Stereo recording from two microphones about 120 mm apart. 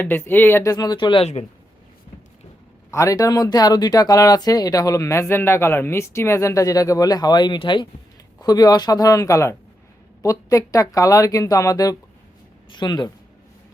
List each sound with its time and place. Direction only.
0.0 s speech: 15° left (ahead or behind); by 1.2 s 40° left (ahead or behind)
1.2 s speech: 65° left (ahead or behind)
2.9 s speech: 25° left (ahead or behind)